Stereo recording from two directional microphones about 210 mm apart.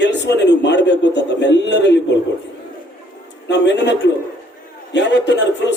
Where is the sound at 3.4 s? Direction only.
55° left (ahead or behind).